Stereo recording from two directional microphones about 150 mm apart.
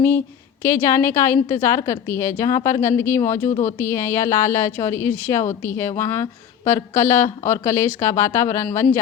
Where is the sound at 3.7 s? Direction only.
15° left (ahead or behind).